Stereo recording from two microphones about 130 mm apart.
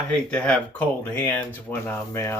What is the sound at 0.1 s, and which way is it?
Speech, 10° left (ahead or behind).